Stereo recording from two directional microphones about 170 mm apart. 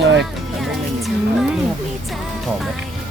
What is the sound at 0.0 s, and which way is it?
Music, 90° right.